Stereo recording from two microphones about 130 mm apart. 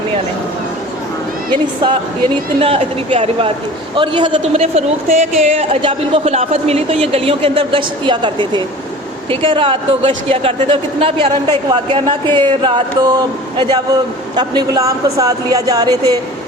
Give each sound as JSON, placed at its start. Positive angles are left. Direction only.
{"t": 1.5, "sound": "speech", "side_deg": -35}
{"t": 4.5, "sound": "a woman's voice", "side_deg": -55}
{"t": 5.8, "sound": "speech", "side_deg": -45}